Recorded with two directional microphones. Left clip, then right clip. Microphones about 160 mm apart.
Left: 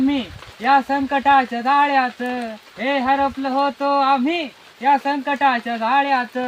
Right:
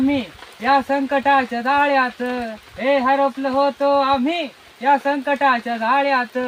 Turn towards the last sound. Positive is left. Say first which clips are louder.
# even
turn(degrees=10)  # may be behind; listen again after turning